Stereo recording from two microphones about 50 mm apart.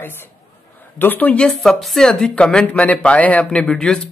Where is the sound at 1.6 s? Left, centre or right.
Centre.